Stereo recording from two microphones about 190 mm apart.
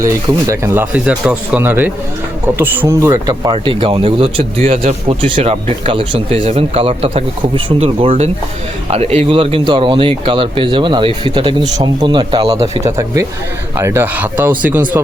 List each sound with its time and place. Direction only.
0.0 s speech: 15° right (ahead or behind)